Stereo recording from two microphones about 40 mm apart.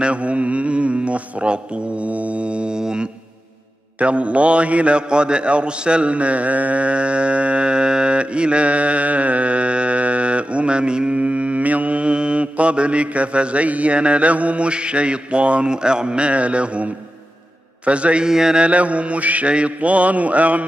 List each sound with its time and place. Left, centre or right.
0.0 s mantra: right
4.0 s a man's voice: right
17.8 s mantra: right
18.2 s mantra: centre
18.6 s mantra: right